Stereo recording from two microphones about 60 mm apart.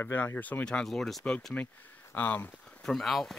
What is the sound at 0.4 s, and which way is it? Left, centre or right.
Speech, left.